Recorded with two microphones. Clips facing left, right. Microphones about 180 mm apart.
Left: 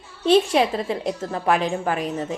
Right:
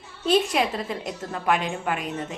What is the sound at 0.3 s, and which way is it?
A woman's voice, 30° left (ahead or behind).